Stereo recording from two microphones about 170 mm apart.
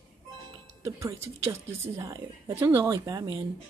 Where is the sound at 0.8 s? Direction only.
15° right (ahead or behind).